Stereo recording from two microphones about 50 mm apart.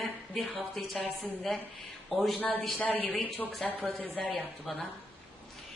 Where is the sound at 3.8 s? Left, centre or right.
Left.